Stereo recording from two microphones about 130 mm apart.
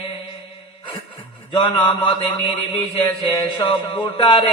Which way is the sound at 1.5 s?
40° left (ahead or behind).